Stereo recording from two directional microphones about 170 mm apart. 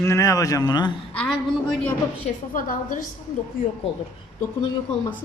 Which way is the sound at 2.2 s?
50° left (ahead or behind).